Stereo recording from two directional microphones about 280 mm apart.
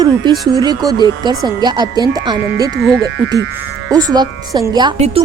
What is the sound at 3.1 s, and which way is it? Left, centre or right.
Speech, right.